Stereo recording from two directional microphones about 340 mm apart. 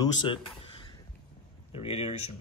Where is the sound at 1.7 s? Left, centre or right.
Centre.